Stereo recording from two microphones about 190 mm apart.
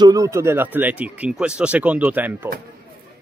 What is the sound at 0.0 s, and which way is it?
Speech, 20° right (ahead or behind).